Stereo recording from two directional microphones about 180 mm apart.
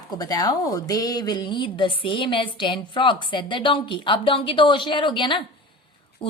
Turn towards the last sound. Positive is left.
turn(degrees=25)  # may be behind; listen again after turning